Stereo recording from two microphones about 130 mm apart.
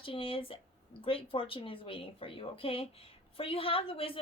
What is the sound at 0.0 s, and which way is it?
A woman's voice, 45° left (ahead or behind).